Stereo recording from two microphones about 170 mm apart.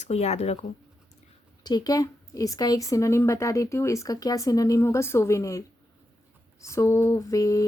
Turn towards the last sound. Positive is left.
turn(degrees=20)  # may be behind; listen again after turning